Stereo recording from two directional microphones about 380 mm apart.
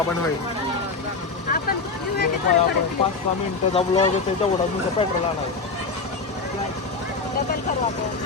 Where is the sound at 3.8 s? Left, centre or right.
Centre.